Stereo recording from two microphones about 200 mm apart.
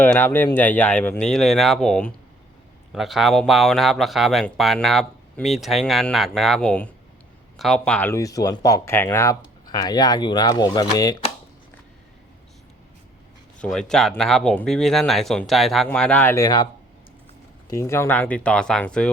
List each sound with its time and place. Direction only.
0.0 s speech: 10° left (ahead or behind)
13.6 s speech: 5° left (ahead or behind)
17.7 s speech: 15° left (ahead or behind)